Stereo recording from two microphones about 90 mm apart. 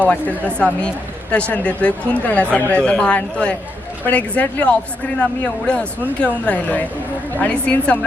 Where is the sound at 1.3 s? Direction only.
15° left (ahead or behind).